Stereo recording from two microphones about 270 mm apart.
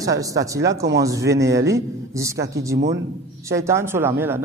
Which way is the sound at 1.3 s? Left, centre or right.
Centre.